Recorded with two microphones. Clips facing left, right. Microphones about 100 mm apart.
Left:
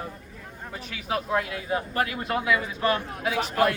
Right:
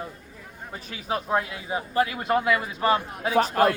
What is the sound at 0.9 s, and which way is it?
A man's voice, 30° right (ahead or behind).